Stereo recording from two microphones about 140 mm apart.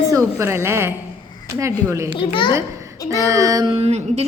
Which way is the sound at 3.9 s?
50° right (ahead or behind).